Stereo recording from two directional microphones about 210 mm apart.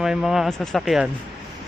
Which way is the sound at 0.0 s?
Centre (ahead or behind).